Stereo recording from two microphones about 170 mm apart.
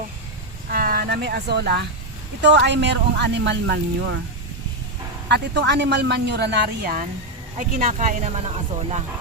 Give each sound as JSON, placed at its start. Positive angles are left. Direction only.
{"t": 0.7, "sound": "speech", "side_deg": -60}
{"t": 2.4, "sound": "speech", "side_deg": -90}
{"t": 5.3, "sound": "speech", "side_deg": -85}
{"t": 7.8, "sound": "speech", "side_deg": -45}